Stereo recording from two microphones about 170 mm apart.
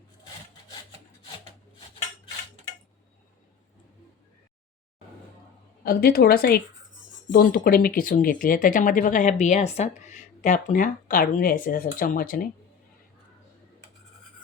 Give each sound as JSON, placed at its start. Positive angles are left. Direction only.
{"t": 5.8, "sound": "speech", "side_deg": 60}